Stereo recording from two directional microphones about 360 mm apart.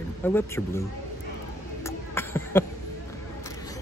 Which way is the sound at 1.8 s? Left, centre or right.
Centre.